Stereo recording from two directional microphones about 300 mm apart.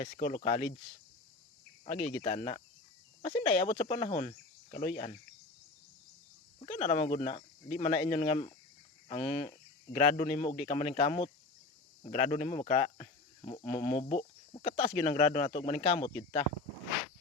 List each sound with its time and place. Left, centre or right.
0.0 s speech: left
1.8 s speech: left
6.7 s speech: left
9.0 s cricket: centre
9.9 s speech: left